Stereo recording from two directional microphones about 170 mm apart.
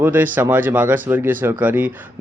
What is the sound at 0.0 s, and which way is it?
A man's voice, 10° right (ahead or behind).